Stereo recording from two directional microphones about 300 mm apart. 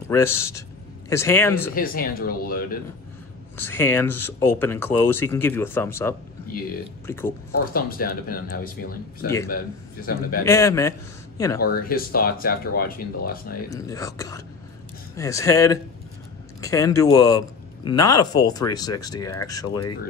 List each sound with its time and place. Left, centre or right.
0.1 s speech: centre
1.8 s speech: left
3.5 s speech: centre
7.7 s speech: left
10.4 s speech: centre
11.6 s speech: left
13.7 s speech: centre